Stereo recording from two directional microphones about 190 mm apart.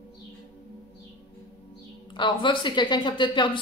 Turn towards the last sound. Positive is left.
turn(degrees=25)  # may be behind; listen again after turning